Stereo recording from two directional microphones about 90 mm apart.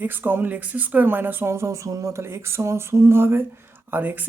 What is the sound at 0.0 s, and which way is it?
Speech, 25° right (ahead or behind).